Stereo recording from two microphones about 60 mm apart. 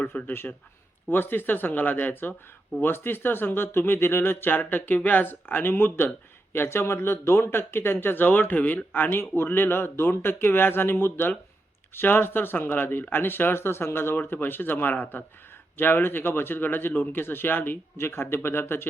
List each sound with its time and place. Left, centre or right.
0.0 s speech: left